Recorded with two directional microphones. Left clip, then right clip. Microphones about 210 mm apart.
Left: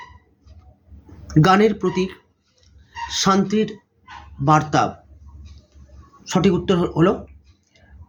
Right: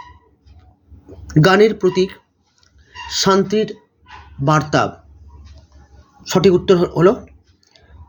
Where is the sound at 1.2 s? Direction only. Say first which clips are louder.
Right 3 dB; 20° right (ahead or behind).